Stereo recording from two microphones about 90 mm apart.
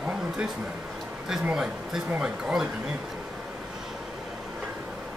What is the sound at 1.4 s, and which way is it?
Speech, 10° right (ahead or behind).